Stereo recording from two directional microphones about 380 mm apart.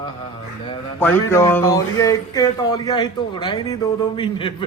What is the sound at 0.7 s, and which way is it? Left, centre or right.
Speech, centre.